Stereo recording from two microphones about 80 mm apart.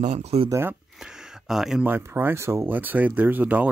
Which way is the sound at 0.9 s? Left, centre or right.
Centre.